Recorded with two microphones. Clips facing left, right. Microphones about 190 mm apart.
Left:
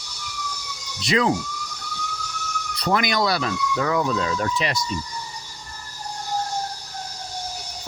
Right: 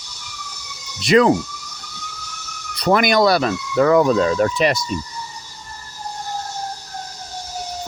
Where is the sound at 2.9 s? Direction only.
60° right (ahead or behind).